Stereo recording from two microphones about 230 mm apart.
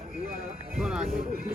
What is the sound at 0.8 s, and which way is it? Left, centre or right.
Music, centre.